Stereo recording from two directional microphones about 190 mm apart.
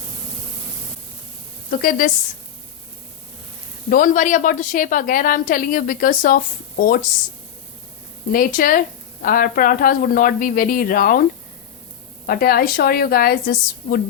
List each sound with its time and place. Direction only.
1.7 s a woman's voice: 50° left (ahead or behind)
3.8 s a woman's voice: 45° left (ahead or behind)
8.3 s a woman's voice: 50° left (ahead or behind)
12.2 s a woman's voice: 50° left (ahead or behind)